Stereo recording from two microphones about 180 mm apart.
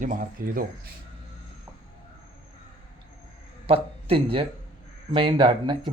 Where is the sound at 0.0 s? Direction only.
50° right (ahead or behind).